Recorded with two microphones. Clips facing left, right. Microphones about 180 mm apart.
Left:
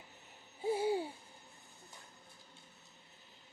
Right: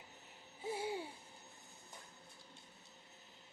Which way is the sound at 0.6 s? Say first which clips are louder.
Left 8 dB; 30° left (ahead or behind).